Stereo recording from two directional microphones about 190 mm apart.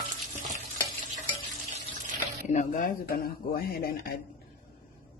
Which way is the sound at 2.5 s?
40° left (ahead or behind).